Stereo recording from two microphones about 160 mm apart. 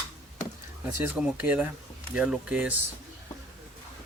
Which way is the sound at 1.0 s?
10° right (ahead or behind).